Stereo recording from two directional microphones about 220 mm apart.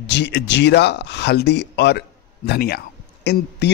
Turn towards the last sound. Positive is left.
turn(degrees=50)  # may be behind; listen again after turning